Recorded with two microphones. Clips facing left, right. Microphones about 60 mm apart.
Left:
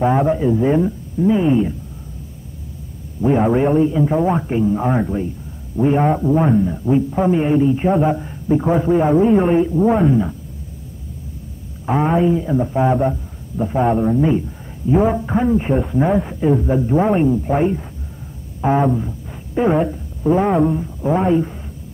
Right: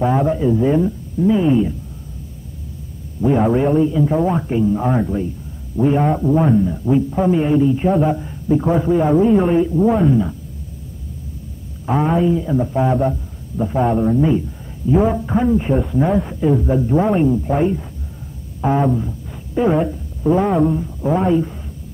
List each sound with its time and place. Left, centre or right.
0.0 s a man's voice: centre
3.3 s a man's voice: centre
11.8 s a man's voice: centre
12.9 s a man's voice: centre
19.5 s speech: centre